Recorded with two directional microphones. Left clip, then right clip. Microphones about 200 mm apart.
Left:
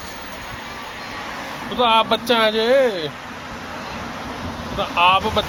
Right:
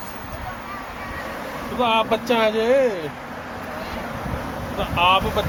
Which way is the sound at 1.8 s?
25° left (ahead or behind).